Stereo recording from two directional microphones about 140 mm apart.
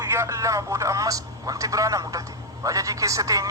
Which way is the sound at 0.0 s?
20° right (ahead or behind).